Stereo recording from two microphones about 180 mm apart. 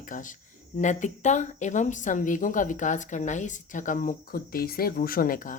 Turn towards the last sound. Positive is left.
turn(degrees=50)  # may be behind; listen again after turning